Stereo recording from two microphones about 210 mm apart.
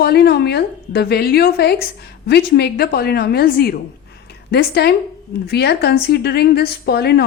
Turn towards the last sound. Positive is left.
turn(degrees=50)  # may be behind; listen again after turning